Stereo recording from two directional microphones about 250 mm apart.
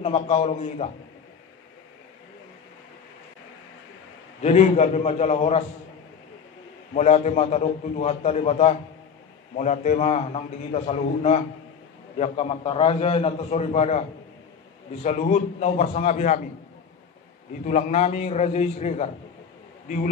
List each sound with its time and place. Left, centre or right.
0.0 s a man's voice: left
4.4 s a man's voice: left
6.9 s a man's voice: left
15.0 s a man's voice: left
17.6 s a man's voice: left